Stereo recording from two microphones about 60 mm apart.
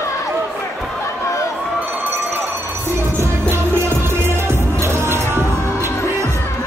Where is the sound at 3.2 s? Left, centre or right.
Right.